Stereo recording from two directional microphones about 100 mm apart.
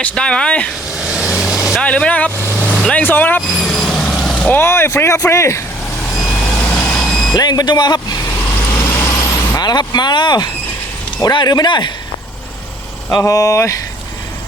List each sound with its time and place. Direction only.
0.0 s speech: 10° left (ahead or behind)
0.9 s vehicle: 5° right (ahead or behind)
1.8 s speech: 10° left (ahead or behind)
2.6 s vehicle: 10° left (ahead or behind)
3.0 s speech: 20° left (ahead or behind)
3.6 s vehicle: centre (ahead or behind)
4.4 s vehicle: 15° left (ahead or behind)
4.6 s speech: 25° left (ahead or behind)
6.1 s vehicle: centre (ahead or behind)
7.3 s speech: 45° left (ahead or behind)
8.7 s vehicle: 20° left (ahead or behind)
9.6 s speech: 45° left (ahead or behind)
13.1 s speech: 35° left (ahead or behind)